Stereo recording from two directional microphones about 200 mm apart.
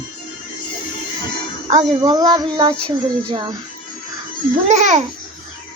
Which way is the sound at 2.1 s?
20° right (ahead or behind).